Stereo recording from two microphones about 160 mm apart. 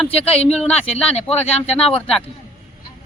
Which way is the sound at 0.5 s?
5° left (ahead or behind).